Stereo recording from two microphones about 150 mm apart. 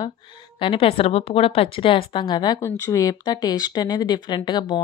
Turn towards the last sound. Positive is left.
turn(degrees=30)  # may be behind; listen again after turning